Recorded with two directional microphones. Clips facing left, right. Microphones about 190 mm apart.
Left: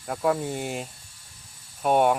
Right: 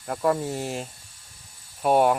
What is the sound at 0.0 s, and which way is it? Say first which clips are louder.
Speech: right 1 dB; centre (ahead or behind).